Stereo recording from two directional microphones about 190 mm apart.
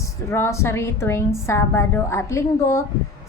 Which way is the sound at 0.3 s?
15° left (ahead or behind).